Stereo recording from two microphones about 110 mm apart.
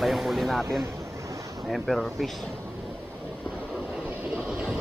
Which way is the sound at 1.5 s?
Centre (ahead or behind).